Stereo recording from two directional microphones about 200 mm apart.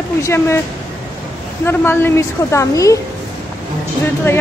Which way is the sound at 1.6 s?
10° left (ahead or behind).